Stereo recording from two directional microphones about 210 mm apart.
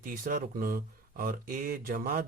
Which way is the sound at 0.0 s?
45° right (ahead or behind).